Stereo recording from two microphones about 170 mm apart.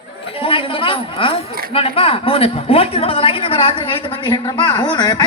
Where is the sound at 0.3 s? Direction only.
35° left (ahead or behind).